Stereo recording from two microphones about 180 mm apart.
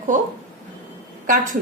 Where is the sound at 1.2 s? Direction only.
45° right (ahead or behind).